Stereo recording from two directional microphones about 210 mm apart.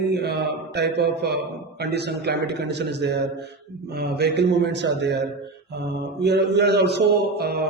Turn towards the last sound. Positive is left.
turn(degrees=-50)  # may be behind; listen again after turning